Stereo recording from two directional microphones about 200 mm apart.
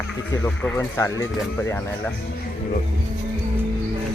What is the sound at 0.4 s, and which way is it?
Speech, 10° left (ahead or behind).